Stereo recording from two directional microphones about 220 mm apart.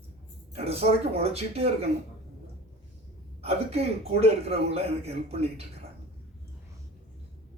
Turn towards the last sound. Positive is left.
turn(degrees=-30)  # may be behind; listen again after turning